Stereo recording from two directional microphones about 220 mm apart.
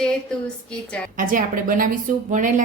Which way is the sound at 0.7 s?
5° left (ahead or behind).